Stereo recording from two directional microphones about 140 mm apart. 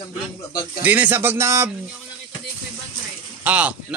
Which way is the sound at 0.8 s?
10° right (ahead or behind).